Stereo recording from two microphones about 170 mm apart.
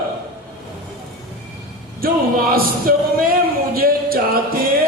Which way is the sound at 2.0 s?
60° right (ahead or behind).